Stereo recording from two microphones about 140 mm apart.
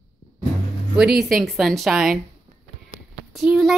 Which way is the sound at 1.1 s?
Centre (ahead or behind).